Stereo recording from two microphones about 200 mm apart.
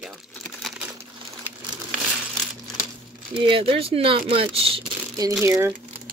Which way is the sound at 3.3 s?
25° right (ahead or behind).